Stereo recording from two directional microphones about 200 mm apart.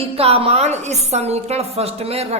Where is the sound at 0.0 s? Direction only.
30° right (ahead or behind).